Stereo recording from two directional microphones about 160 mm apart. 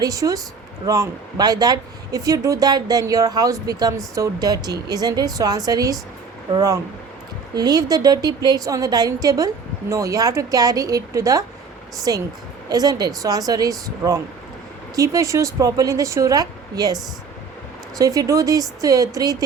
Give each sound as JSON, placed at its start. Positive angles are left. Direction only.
{"t": 0.0, "sound": "speech", "side_deg": -20}